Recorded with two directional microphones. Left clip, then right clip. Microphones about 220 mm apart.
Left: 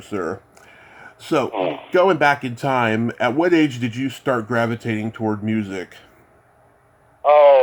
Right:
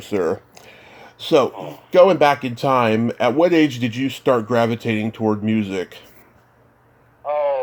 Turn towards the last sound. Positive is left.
turn(degrees=25)  # may be behind; listen again after turning